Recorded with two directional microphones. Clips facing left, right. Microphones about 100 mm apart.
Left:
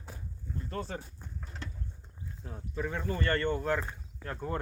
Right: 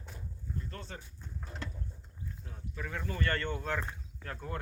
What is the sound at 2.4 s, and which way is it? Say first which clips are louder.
Speech: left 5 dB; 30° left (ahead or behind).